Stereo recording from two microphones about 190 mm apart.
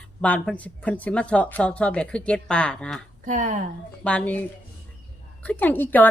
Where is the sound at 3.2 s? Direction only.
40° right (ahead or behind).